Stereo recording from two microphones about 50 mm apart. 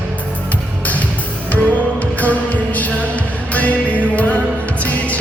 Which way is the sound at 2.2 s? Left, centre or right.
Left.